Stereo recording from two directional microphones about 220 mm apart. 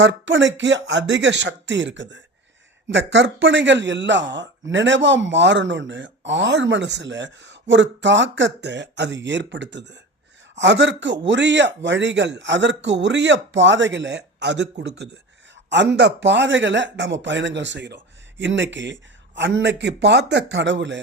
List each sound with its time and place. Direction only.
0.0 s a man's voice: 55° right (ahead or behind)